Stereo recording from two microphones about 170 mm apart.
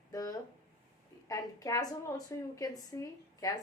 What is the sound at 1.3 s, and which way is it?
Speech, 20° left (ahead or behind).